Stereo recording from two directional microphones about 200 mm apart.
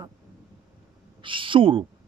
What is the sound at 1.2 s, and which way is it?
Speech, 25° right (ahead or behind).